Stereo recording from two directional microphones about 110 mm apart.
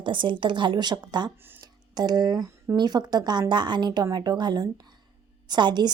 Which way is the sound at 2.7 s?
40° right (ahead or behind).